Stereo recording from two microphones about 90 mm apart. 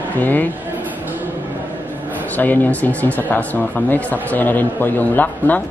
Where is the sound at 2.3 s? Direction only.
20° left (ahead or behind).